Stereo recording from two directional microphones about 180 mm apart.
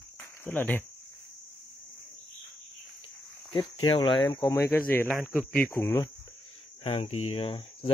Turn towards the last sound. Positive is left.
turn(degrees=30)  # may be behind; listen again after turning